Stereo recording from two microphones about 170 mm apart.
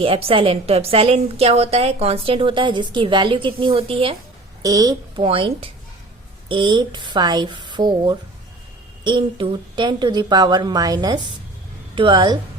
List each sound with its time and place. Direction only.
0.0 s a woman's voice: 35° right (ahead or behind)
4.6 s a woman's voice: 20° right (ahead or behind)